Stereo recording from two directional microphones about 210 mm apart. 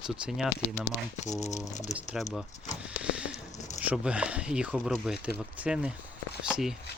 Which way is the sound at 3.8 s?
5° right (ahead or behind).